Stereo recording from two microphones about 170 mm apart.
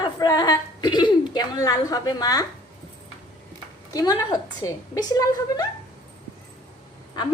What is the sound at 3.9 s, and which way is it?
A woman's voice, 20° left (ahead or behind).